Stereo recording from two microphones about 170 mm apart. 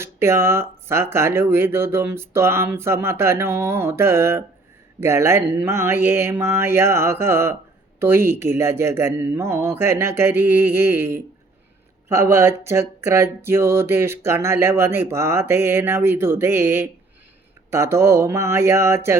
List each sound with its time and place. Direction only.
0.0 s speech: 15° right (ahead or behind)